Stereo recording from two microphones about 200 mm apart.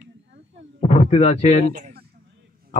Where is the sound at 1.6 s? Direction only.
45° right (ahead or behind).